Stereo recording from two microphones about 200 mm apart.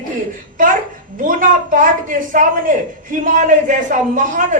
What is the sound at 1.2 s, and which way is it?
Speech, 45° right (ahead or behind).